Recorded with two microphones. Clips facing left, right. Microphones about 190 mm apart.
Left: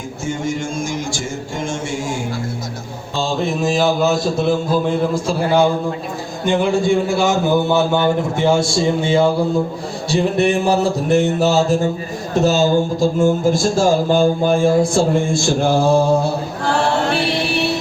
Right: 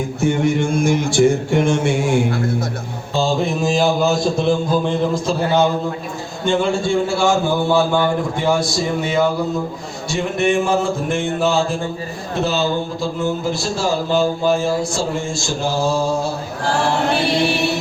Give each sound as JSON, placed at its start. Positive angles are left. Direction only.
{"t": 0.2, "sound": "speech", "side_deg": -60}
{"t": 3.2, "sound": "mantra", "side_deg": 0}
{"t": 6.5, "sound": "a man's voice", "side_deg": 20}
{"t": 10.1, "sound": "a sound", "side_deg": 35}
{"t": 12.3, "sound": "speech", "side_deg": 45}